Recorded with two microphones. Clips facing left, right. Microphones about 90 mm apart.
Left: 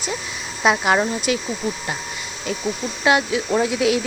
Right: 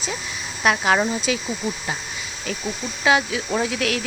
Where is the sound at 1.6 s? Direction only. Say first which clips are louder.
Left 1 dB; 10° right (ahead or behind).